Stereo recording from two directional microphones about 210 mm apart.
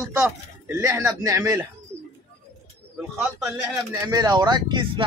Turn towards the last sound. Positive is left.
turn(degrees=-20)  # may be behind; listen again after turning